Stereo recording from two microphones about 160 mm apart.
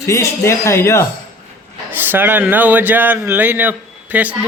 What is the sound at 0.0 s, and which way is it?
Speech, 20° left (ahead or behind).